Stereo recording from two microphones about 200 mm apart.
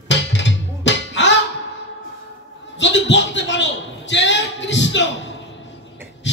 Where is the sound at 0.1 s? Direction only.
60° left (ahead or behind).